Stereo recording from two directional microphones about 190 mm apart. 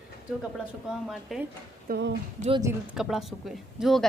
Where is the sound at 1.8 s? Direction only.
55° right (ahead or behind).